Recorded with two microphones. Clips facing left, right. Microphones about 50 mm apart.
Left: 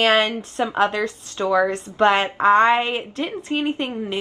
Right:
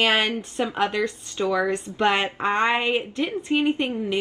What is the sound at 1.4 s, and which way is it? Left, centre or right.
A woman's voice, centre.